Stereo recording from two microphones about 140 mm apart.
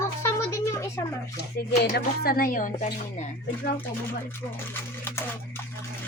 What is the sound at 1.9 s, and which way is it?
A woman's voice, 90° left.